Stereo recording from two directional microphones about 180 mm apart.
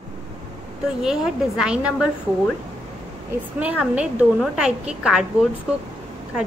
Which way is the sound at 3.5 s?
10° right (ahead or behind).